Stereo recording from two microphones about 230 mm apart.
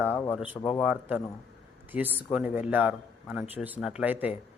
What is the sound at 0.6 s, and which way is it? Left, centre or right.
Speech, left.